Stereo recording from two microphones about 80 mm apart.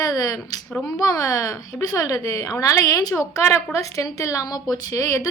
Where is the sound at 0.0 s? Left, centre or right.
Left.